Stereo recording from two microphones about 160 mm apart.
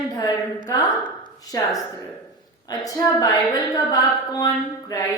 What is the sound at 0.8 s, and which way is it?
Speech, 30° left (ahead or behind).